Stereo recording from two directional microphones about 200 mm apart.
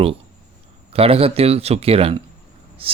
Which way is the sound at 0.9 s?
30° right (ahead or behind).